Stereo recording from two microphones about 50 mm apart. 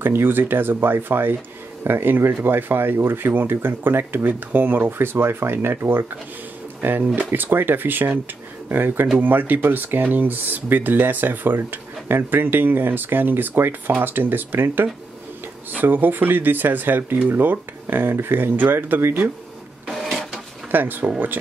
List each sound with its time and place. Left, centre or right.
0.0 s speech: right
19.9 s printer: centre
20.7 s speech: right